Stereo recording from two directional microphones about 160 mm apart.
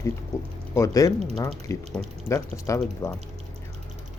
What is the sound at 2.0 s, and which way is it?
Speech, 10° left (ahead or behind).